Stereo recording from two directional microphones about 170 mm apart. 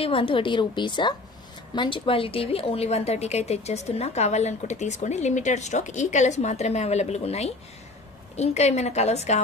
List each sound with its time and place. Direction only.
0.0 s a woman's voice: 30° left (ahead or behind)